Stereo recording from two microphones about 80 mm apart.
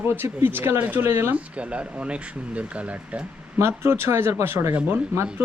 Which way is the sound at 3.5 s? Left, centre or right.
Right.